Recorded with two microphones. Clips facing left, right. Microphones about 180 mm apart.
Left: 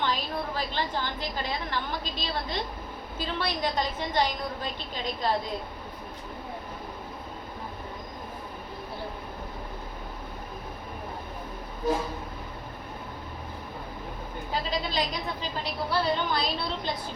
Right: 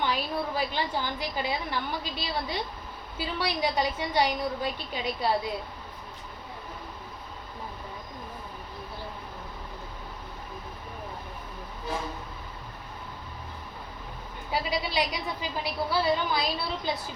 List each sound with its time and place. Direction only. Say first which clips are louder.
0.0 s a woman's voice: right 1 dB; 10° right (ahead or behind)
14.5 s a woman's voice: right 1 dB; 10° right (ahead or behind)